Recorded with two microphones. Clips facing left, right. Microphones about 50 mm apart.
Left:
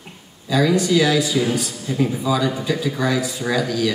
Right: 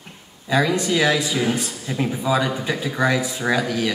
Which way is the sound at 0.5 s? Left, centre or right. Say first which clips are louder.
Left 2 dB; right.